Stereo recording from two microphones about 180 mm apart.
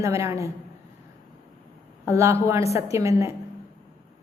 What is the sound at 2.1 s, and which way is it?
A woman's voice, 15° right (ahead or behind).